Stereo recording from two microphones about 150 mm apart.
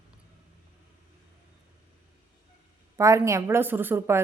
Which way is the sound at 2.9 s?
20° right (ahead or behind).